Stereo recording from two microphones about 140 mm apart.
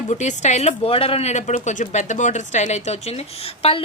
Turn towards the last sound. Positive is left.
turn(degrees=45)  # may be behind; listen again after turning